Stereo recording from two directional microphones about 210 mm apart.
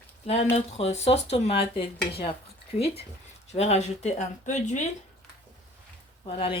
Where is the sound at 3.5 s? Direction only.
30° left (ahead or behind).